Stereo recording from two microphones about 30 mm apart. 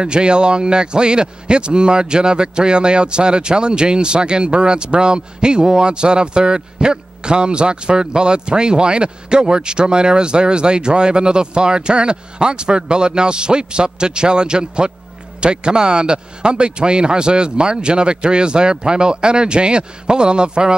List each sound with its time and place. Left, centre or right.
0.0 s a man's voice: right